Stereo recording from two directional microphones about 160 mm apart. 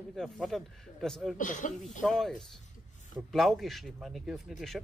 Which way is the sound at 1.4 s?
50° left (ahead or behind).